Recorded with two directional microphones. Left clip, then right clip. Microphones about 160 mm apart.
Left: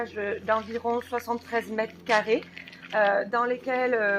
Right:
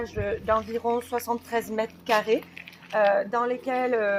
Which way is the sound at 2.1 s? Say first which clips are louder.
Even; 50° right (ahead or behind).